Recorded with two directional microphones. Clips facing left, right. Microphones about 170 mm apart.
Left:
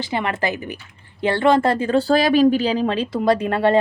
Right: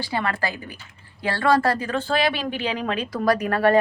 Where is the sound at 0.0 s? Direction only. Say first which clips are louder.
Left 3 dB; 20° left (ahead or behind).